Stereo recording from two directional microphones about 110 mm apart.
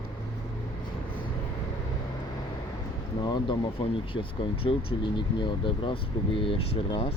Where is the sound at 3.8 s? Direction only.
55° left (ahead or behind).